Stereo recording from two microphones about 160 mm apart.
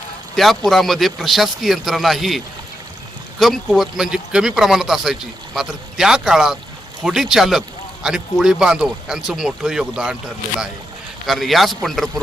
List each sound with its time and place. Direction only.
0.3 s speech: centre (ahead or behind)
11.3 s speech: centre (ahead or behind)